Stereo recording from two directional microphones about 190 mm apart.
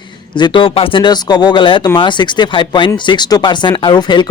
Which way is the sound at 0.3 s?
25° left (ahead or behind).